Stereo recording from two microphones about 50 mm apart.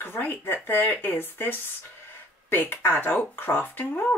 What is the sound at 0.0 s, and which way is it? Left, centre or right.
Speech, left.